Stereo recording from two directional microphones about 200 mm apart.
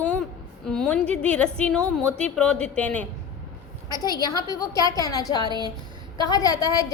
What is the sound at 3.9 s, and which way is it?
A woman's voice, 20° left (ahead or behind).